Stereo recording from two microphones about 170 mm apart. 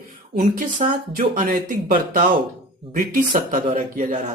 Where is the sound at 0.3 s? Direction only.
50° right (ahead or behind).